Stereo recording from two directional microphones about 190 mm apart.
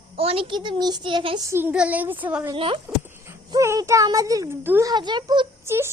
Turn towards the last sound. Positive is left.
turn(degrees=-15)  # may be behind; listen again after turning